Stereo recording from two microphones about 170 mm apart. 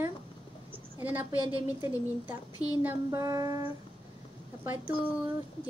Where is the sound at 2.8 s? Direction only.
20° right (ahead or behind).